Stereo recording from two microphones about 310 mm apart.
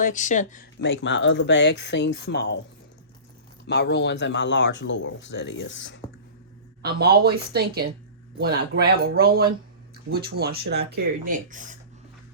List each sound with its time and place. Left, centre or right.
0.0 s speech: left
3.7 s speech: left
6.8 s speech: right